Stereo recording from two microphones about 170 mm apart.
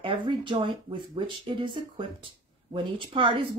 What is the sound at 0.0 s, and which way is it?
Speech, 30° right (ahead or behind).